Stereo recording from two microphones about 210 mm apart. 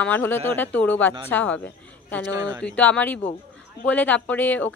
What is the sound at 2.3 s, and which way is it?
Speech, 15° right (ahead or behind).